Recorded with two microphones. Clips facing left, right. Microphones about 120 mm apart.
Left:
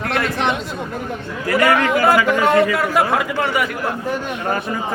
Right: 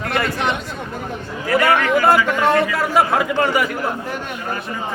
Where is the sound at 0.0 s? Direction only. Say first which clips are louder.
Left 1 dB; centre (ahead or behind).